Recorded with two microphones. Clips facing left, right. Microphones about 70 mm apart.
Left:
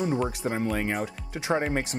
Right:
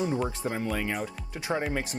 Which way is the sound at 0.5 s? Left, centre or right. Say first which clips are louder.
Left 3 dB; left.